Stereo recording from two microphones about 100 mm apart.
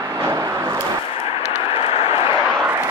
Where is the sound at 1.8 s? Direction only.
70° left (ahead or behind).